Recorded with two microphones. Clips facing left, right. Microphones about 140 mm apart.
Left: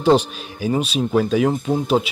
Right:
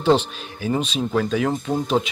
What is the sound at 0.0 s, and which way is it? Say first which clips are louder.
Speech: left 2 dB; 10° left (ahead or behind).